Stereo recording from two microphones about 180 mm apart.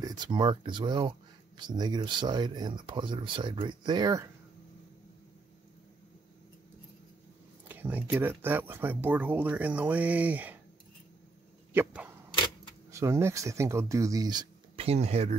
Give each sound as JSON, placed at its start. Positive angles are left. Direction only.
{"t": 0.0, "sound": "speech", "side_deg": -25}
{"t": 7.6, "sound": "speech", "side_deg": -10}
{"t": 11.7, "sound": "speech", "side_deg": -10}
{"t": 14.8, "sound": "speech", "side_deg": -35}